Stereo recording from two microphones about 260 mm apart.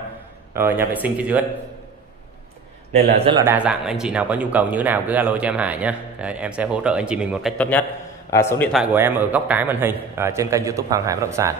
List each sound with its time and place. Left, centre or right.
0.6 s speech: centre
2.9 s a man's voice: right
3.4 s a man's voice: centre
8.7 s a man's voice: centre